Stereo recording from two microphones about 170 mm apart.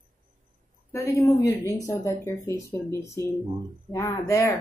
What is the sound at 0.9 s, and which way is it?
Speech, 15° left (ahead or behind).